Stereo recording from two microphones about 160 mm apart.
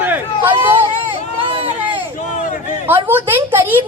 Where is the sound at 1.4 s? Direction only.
35° right (ahead or behind).